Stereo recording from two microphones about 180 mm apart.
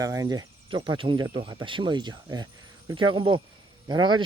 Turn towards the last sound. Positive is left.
turn(degrees=-25)  # may be behind; listen again after turning